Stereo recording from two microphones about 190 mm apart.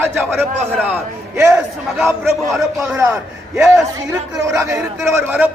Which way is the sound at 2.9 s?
15° right (ahead or behind).